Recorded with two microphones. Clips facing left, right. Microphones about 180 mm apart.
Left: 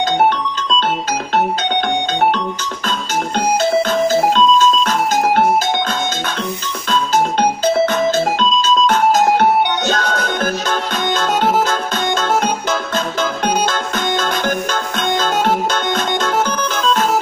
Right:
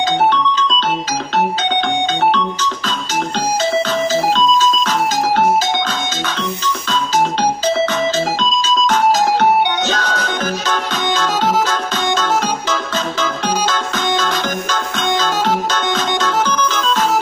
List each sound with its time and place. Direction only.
8.8 s music: 55° left (ahead or behind)